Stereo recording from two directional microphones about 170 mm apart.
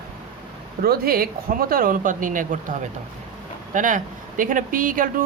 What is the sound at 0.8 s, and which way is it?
Speech, 60° right (ahead or behind).